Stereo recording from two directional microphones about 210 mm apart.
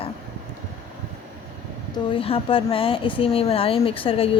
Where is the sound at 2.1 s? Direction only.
25° left (ahead or behind).